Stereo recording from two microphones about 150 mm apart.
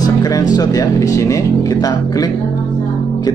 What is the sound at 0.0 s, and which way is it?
Speech, 25° left (ahead or behind).